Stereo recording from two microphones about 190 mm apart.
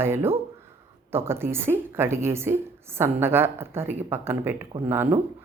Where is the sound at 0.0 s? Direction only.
10° right (ahead or behind).